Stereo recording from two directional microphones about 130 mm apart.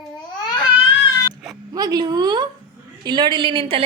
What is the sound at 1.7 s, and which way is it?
A woman's voice, 30° right (ahead or behind).